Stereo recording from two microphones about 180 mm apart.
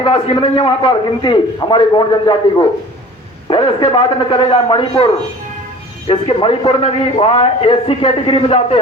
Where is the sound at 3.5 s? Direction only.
25° left (ahead or behind).